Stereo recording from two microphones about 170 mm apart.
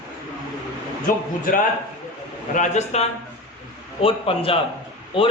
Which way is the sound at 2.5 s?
45° left (ahead or behind).